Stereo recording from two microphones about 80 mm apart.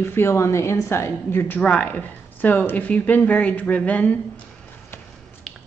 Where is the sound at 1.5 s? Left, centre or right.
Centre.